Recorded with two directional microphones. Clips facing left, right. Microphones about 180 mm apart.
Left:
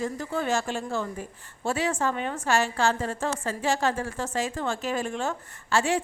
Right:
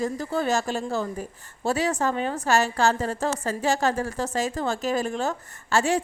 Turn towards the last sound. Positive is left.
turn(degrees=-40)  # may be behind; listen again after turning